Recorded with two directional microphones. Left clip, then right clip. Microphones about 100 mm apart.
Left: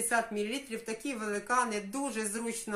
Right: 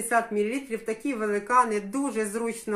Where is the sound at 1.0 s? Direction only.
20° left (ahead or behind).